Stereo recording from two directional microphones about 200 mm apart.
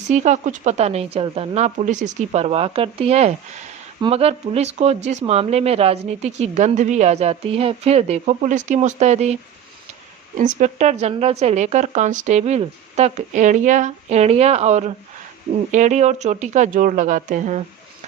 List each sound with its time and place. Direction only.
0.1 s speech: 35° right (ahead or behind)
10.3 s speech: 40° right (ahead or behind)